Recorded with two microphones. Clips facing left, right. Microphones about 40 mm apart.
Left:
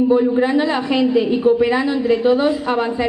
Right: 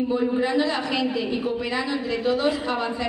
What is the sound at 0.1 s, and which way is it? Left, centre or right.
A man's voice, left.